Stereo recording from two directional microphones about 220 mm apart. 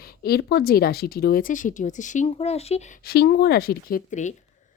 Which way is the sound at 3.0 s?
45° left (ahead or behind).